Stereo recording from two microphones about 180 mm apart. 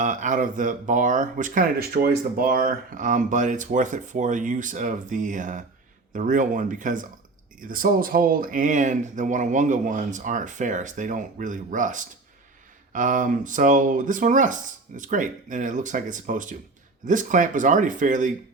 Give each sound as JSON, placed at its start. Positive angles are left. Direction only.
{"t": 0.0, "sound": "speech", "side_deg": -45}